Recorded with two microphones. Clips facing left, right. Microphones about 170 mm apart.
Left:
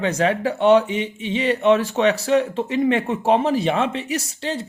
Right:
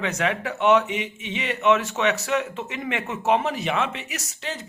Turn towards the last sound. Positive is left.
turn(degrees=30)  # may be behind; listen again after turning